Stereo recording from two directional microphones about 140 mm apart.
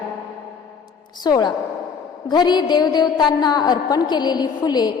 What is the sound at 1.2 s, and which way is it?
A woman's voice, 30° left (ahead or behind).